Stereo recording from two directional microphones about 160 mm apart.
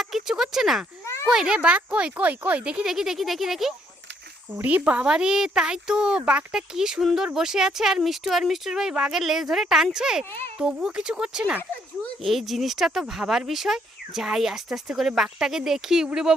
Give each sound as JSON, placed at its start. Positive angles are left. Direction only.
{"t": 0.0, "sound": "a sound", "side_deg": 0}
{"t": 1.0, "sound": "children playing", "side_deg": 15}
{"t": 1.3, "sound": "speech", "side_deg": -5}